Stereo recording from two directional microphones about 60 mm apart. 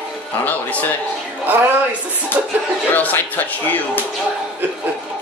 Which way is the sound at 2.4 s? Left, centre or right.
Right.